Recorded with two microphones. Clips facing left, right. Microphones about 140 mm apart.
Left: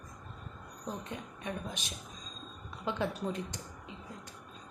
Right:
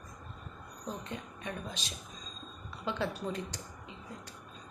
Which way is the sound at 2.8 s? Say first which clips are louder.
Left 1 dB; 15° left (ahead or behind).